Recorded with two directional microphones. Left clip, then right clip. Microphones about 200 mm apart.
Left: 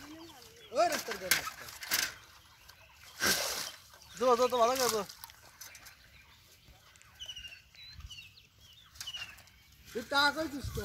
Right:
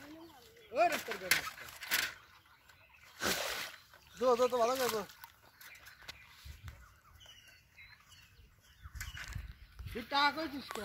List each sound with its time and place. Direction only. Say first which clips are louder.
0.7 s speech: left 1 dB; 10° right (ahead or behind)
3.3 s a sound: left 4 dB; 5° left (ahead or behind)
4.2 s speech: left 3 dB; 25° left (ahead or behind)
10.1 s speech: left 3 dB; 20° right (ahead or behind)